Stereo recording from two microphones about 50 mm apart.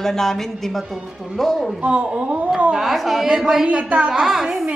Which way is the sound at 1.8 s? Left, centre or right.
Right.